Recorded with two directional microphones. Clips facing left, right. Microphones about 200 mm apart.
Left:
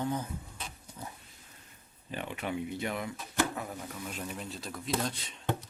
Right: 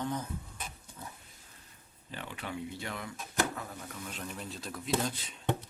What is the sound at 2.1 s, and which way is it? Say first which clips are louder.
Speech: left 5 dB; 20° left (ahead or behind).